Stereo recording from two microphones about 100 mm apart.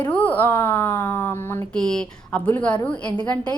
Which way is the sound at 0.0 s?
15° left (ahead or behind).